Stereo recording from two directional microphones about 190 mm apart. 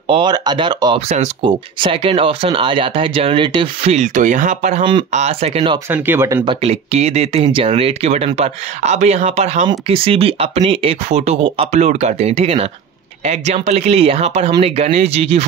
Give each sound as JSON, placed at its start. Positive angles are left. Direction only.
{"t": 0.1, "sound": "speech", "side_deg": -25}
{"t": 1.0, "sound": "speech", "side_deg": -35}
{"t": 1.4, "sound": "speech", "side_deg": -25}
{"t": 5.9, "sound": "speech", "side_deg": -10}
{"t": 6.4, "sound": "speech", "side_deg": -30}